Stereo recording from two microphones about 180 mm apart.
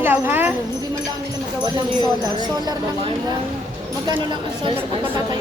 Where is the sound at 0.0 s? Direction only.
10° right (ahead or behind).